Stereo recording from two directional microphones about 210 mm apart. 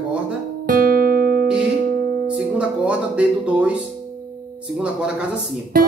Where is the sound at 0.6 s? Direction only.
40° right (ahead or behind).